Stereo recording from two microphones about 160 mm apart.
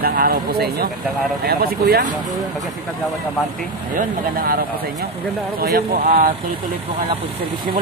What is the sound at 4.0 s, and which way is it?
Speech, 65° right (ahead or behind).